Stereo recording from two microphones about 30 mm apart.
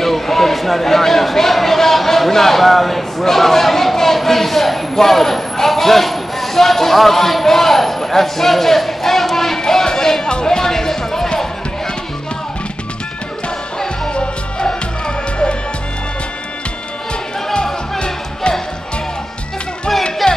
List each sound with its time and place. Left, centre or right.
0.0 s a sound: centre
9.6 s music: centre
14.6 s music: left
17.9 s music: left
20.2 s music: centre